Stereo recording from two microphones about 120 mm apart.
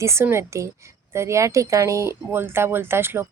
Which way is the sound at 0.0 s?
20° right (ahead or behind).